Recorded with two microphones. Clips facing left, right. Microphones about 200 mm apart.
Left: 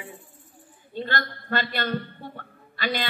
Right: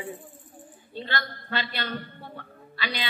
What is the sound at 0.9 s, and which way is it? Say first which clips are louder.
A woman's voice: left 3 dB; 50° left (ahead or behind).